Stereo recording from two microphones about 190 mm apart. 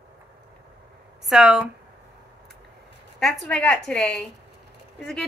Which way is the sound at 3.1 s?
Centre (ahead or behind).